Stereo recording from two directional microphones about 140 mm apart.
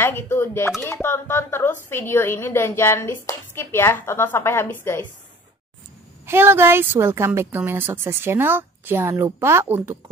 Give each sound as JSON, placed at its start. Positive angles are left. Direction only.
{"t": 0.0, "sound": "a woman's voice", "side_deg": 15}
{"t": 6.2, "sound": "a woman's voice", "side_deg": -15}